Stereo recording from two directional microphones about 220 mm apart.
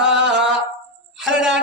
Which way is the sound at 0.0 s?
5° right (ahead or behind).